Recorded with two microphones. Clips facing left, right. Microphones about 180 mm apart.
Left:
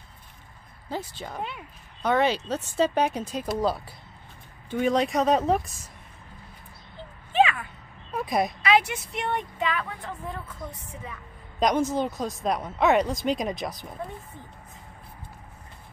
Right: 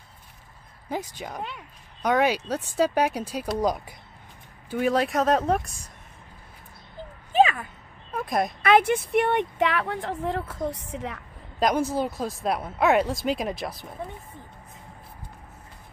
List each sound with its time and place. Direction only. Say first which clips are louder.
0.8 s speech: right 2 dB; 15° right (ahead or behind)
4.6 s speech: even; 5° right (ahead or behind)
7.3 s a sound: right 2 dB; 40° right (ahead or behind)
8.1 s speech: even; centre (ahead or behind)
8.6 s speech: right 4 dB; 55° right (ahead or behind); by 11.1 s 80° right
11.6 s speech: even; 10° right (ahead or behind)